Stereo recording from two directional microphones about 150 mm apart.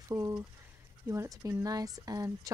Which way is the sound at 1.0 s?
20° right (ahead or behind).